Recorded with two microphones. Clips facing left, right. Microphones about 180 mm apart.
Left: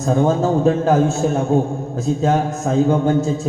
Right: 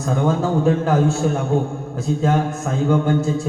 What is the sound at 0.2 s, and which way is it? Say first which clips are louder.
A man's voice: left 2 dB; 25° left (ahead or behind).